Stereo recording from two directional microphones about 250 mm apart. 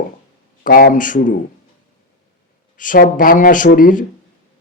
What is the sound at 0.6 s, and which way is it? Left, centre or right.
Speech, left.